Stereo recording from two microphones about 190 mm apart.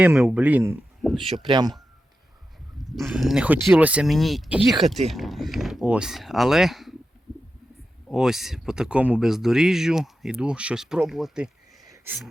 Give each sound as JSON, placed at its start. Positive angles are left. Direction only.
{"t": 0.0, "sound": "speech", "side_deg": -5}
{"t": 1.0, "sound": "speech", "side_deg": 0}
{"t": 1.5, "sound": "speech", "side_deg": -20}
{"t": 2.7, "sound": "speech", "side_deg": 0}
{"t": 8.1, "sound": "speech", "side_deg": 0}